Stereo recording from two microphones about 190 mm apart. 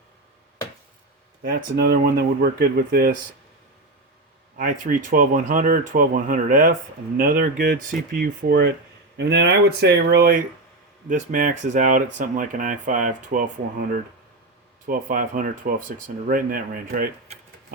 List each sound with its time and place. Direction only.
1.5 s speech: 55° right (ahead or behind)
4.5 s speech: 45° right (ahead or behind)
11.1 s speech: 45° right (ahead or behind)
14.8 s speech: 45° right (ahead or behind)